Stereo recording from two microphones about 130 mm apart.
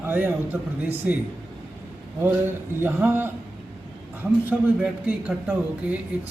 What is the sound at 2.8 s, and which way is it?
Speech, 15° right (ahead or behind).